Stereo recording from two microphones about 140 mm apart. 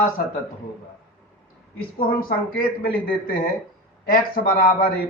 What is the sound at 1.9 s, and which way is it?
Speech, 90° left.